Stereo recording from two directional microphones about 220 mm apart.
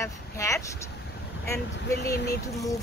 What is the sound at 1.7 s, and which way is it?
Speech, 50° left (ahead or behind).